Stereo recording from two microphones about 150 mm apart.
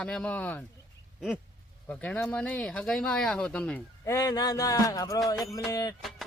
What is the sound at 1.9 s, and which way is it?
Speech, 10° left (ahead or behind).